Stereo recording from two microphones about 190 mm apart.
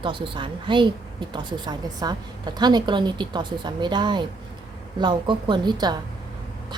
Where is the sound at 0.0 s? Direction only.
25° right (ahead or behind).